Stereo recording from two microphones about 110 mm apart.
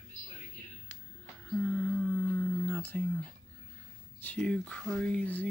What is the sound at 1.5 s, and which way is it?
Humming, 10° left (ahead or behind).